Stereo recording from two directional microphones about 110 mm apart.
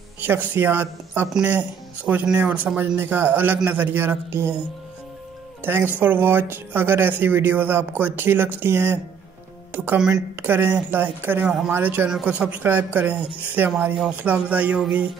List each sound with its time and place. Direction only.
0.2 s speech: 20° right (ahead or behind)
5.6 s speech: 20° right (ahead or behind)
9.9 s speech: 5° right (ahead or behind)
10.4 s speech: 20° right (ahead or behind)
11.4 s speech: 5° right (ahead or behind)
11.7 s speech: 15° right (ahead or behind)